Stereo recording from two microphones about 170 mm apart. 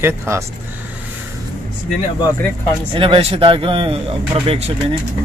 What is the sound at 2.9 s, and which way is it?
Speech, 30° right (ahead or behind).